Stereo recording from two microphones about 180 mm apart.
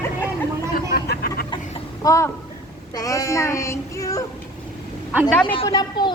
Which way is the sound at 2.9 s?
20° left (ahead or behind).